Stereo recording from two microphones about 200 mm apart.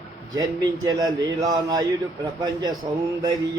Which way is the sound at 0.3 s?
20° right (ahead or behind).